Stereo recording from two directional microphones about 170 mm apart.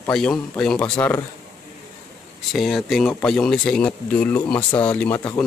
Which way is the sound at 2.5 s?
Centre (ahead or behind).